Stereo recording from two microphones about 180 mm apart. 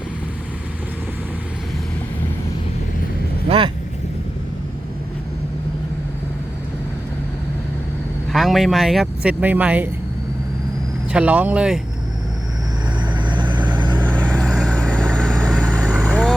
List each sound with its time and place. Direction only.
3.5 s vehicle: 35° right (ahead or behind)
8.3 s speech: centre (ahead or behind)
11.1 s speech: 10° right (ahead or behind)
13.0 s vehicle: 25° right (ahead or behind)
14.1 s vehicle: 5° left (ahead or behind)